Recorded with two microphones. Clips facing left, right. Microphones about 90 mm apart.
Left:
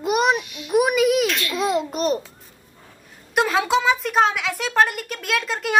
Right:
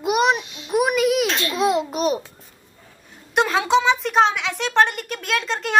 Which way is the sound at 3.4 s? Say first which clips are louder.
Right 1 dB; centre (ahead or behind).